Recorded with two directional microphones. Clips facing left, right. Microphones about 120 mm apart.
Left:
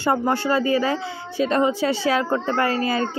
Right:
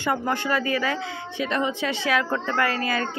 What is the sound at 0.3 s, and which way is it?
Speech, 30° left (ahead or behind).